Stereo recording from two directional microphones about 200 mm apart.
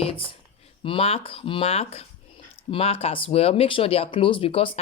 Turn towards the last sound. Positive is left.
turn(degrees=25)  # may be behind; listen again after turning